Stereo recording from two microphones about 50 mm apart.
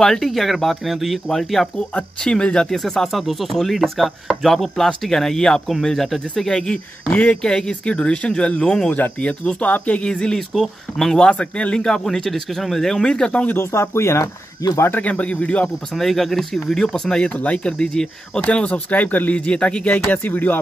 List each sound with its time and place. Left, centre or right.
0.0 s speech: centre
2.2 s speech: centre
2.8 s speech: centre
10.5 s speech: centre
11.1 s speech: centre
13.0 s speech: centre
13.6 s speech: left
15.0 s speech: left
15.9 s speech: centre; by 17.7 s left
17.7 s speech: centre
18.4 s speech: left
19.4 s speech: left